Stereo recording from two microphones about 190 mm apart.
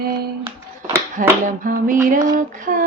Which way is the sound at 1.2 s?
45° right (ahead or behind).